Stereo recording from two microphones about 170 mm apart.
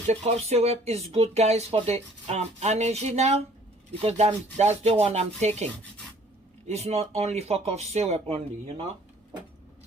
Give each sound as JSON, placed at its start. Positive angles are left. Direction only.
{"t": 0.1, "sound": "speech", "side_deg": -40}
{"t": 6.7, "sound": "speech", "side_deg": -40}